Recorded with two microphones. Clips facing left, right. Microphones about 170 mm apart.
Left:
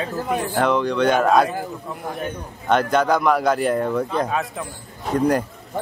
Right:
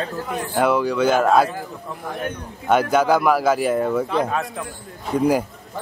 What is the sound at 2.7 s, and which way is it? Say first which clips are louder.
Speech: right 1 dB; 5° right (ahead or behind).